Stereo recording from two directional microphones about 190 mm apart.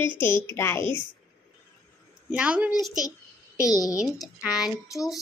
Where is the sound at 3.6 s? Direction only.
20° left (ahead or behind).